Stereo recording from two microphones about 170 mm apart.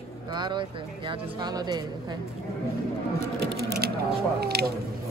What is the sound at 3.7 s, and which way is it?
Speech, 65° right (ahead or behind).